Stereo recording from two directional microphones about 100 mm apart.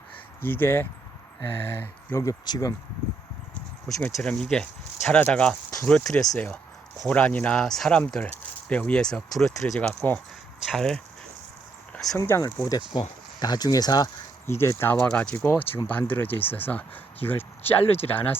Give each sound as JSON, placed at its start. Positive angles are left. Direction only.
{"t": 0.4, "sound": "speech", "side_deg": 20}
{"t": 2.2, "sound": "speech", "side_deg": 40}
{"t": 4.0, "sound": "speech", "side_deg": 10}
{"t": 6.1, "sound": "speech", "side_deg": 10}
{"t": 12.1, "sound": "speech", "side_deg": 25}
{"t": 12.9, "sound": "speech", "side_deg": 45}
{"t": 14.4, "sound": "speech", "side_deg": 25}